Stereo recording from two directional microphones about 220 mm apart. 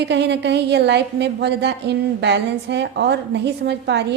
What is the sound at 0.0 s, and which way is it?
A woman's voice, 50° right (ahead or behind).